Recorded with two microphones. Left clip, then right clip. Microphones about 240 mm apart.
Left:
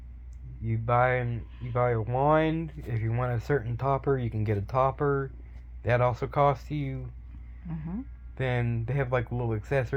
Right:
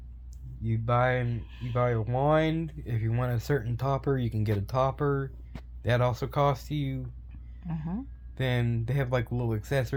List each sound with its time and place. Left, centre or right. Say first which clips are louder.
0.6 s speech: left 2 dB; centre
7.7 s speech: right 1 dB; right
8.4 s speech: even; centre